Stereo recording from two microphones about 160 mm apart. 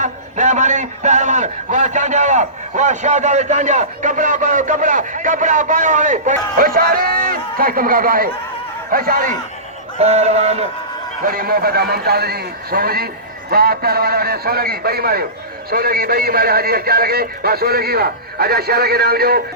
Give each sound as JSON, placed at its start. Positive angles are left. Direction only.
{"t": 0.0, "sound": "a man's voice", "side_deg": -50}
{"t": 10.0, "sound": "a man's voice", "side_deg": -45}
{"t": 11.2, "sound": "a man's voice", "side_deg": -65}